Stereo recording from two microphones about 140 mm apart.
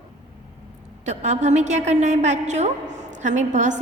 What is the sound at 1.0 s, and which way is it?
A woman's voice, 55° right (ahead or behind).